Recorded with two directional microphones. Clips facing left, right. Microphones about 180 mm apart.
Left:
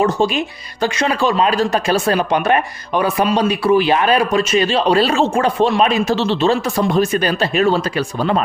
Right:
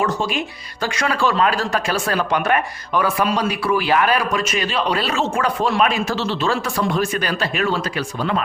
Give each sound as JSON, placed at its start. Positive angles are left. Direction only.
{"t": 0.0, "sound": "speech", "side_deg": 25}